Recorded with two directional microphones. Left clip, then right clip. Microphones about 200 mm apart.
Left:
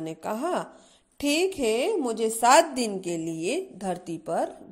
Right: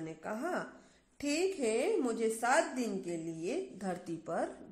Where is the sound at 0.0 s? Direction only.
30° left (ahead or behind).